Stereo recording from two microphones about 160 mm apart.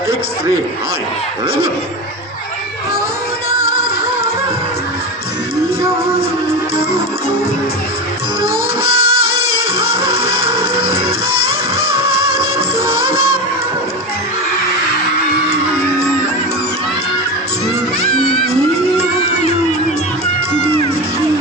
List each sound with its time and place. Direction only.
3.7 s music: 30° right (ahead or behind)
8.8 s music: 30° right (ahead or behind)
11.9 s music of bollywood: 30° right (ahead or behind)